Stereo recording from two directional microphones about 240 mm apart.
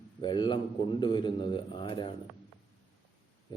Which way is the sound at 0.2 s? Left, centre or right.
Centre.